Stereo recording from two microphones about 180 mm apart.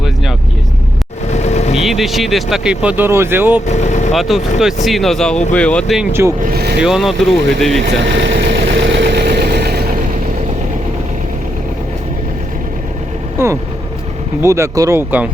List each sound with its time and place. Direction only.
1.3 s vehicle: 40° left (ahead or behind)
1.7 s speech: centre (ahead or behind)
3.7 s speech: 40° left (ahead or behind)
4.1 s speech: centre (ahead or behind)
6.5 s speech: 60° right (ahead or behind)
6.8 s speech: centre (ahead or behind)
7.8 s vehicle: 70° right (ahead or behind)
13.4 s vehicle: 15° right (ahead or behind)
14.4 s speech: 15° right (ahead or behind)